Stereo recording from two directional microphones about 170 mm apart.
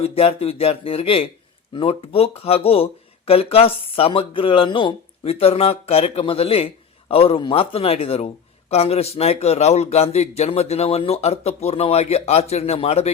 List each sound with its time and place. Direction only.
0.0 s speech: 35° left (ahead or behind)